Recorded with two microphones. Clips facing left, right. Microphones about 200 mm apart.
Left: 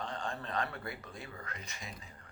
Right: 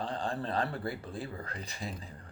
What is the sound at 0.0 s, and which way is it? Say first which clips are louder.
A man's voice: right 5 dB; 35° right (ahead or behind).